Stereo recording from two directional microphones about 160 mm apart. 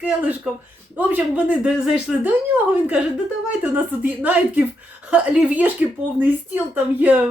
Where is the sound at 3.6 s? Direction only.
10° right (ahead or behind).